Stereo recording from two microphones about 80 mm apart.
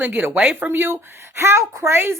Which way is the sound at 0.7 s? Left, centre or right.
Right.